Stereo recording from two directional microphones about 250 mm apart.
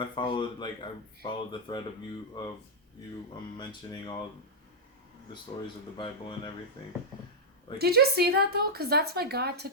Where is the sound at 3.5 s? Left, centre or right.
Centre.